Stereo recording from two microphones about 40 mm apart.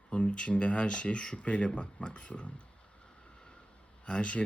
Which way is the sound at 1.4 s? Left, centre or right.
Left.